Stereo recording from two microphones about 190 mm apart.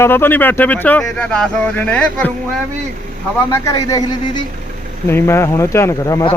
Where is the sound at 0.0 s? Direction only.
10° left (ahead or behind).